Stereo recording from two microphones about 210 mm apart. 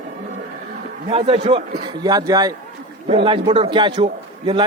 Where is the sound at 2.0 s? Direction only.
15° right (ahead or behind).